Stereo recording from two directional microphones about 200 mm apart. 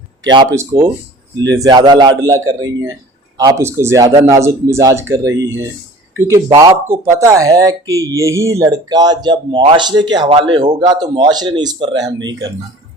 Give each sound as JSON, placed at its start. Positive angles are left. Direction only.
{"t": 0.3, "sound": "speech", "side_deg": -20}